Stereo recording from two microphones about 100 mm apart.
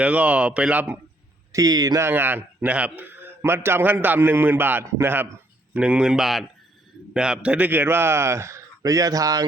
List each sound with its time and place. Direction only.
0.0 s speech: 15° right (ahead or behind)
1.5 s speech: 40° right (ahead or behind)
2.0 s a man's voice: 20° right (ahead or behind)
5.7 s a man's voice: 10° right (ahead or behind); by 9.5 s 40° right (ahead or behind)